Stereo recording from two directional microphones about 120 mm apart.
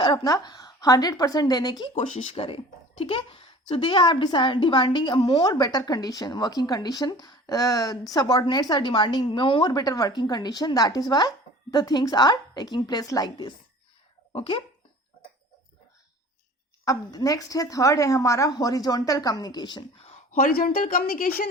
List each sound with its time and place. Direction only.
0.0 s a woman's voice: 40° left (ahead or behind)
2.3 s a woman's voice: 50° left (ahead or behind)
16.8 s speech: 30° left (ahead or behind)
20.0 s speech: 75° left (ahead or behind)